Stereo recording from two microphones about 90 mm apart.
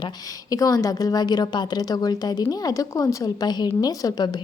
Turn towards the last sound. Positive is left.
turn(degrees=50)  # may be behind; listen again after turning